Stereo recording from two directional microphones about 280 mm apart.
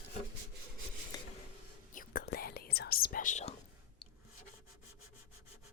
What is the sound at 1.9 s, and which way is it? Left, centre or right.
Whispering, left.